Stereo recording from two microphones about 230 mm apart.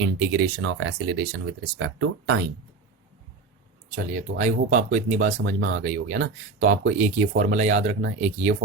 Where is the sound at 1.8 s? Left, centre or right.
Right.